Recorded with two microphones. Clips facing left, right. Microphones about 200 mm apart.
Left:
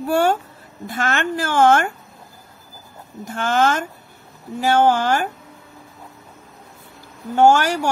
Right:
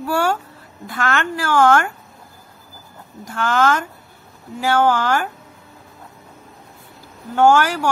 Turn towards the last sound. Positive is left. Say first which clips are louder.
# even
turn(degrees=15)  # may be behind; listen again after turning